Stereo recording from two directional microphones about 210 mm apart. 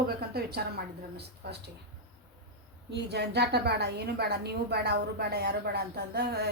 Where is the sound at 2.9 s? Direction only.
50° right (ahead or behind).